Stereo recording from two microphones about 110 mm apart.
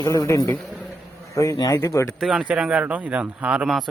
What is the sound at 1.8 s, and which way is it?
Speech, 25° left (ahead or behind).